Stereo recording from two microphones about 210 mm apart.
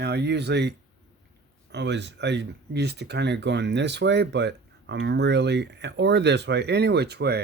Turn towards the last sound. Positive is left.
turn(degrees=-50)  # may be behind; listen again after turning